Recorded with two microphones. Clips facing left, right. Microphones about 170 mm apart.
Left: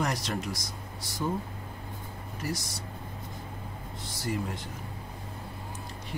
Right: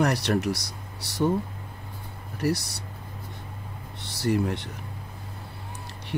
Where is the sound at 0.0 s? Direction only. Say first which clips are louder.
Right 7 dB; 65° right (ahead or behind).